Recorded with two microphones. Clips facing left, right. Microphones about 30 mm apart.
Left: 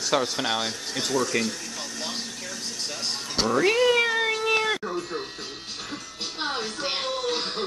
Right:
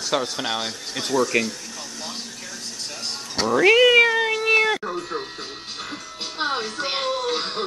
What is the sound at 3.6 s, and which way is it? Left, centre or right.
Speech, right.